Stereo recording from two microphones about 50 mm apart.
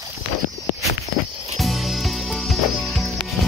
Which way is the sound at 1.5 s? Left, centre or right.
Centre.